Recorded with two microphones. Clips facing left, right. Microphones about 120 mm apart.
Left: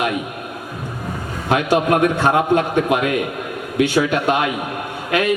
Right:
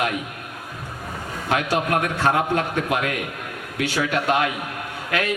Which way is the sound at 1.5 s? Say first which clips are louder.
Left 6 dB; 20° left (ahead or behind).